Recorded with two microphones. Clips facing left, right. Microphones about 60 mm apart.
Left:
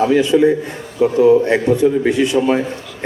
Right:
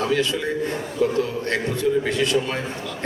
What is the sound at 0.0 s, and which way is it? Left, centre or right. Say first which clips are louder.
A man's voice: left 10 dB; centre.